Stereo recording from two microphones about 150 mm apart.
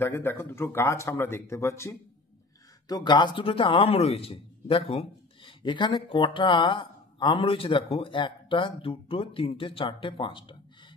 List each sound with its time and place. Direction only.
0.0 s speech: 15° left (ahead or behind)
2.9 s a man's voice: 30° left (ahead or behind)